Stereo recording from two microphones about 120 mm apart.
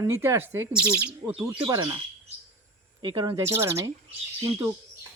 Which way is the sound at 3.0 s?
40° right (ahead or behind).